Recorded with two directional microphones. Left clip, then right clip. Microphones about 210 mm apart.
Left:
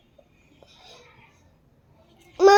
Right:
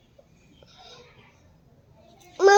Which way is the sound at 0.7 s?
20° left (ahead or behind).